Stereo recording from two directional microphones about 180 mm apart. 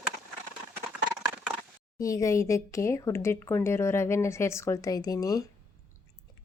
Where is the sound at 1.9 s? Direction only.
20° left (ahead or behind).